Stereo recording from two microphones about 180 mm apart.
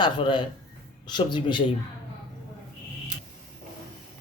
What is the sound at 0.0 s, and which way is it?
Speech, 25° left (ahead or behind).